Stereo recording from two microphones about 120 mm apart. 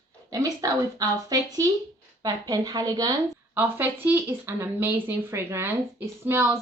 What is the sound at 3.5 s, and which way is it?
Speech, 15° right (ahead or behind).